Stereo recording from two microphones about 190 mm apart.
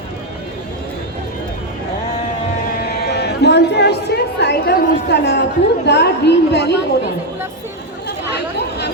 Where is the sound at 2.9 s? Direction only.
60° left (ahead or behind).